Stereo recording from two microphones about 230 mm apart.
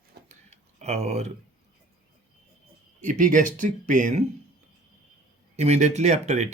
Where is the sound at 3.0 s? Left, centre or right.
Right.